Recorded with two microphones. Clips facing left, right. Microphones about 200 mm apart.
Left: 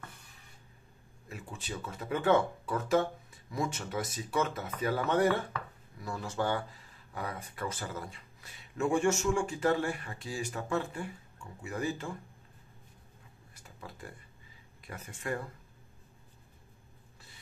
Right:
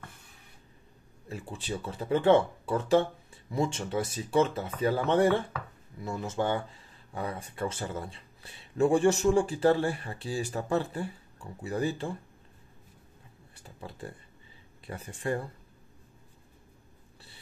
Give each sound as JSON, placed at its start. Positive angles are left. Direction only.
{"t": 1.3, "sound": "speech", "side_deg": -30}
{"t": 13.6, "sound": "a sound", "side_deg": -30}
{"t": 14.9, "sound": "speech", "side_deg": -30}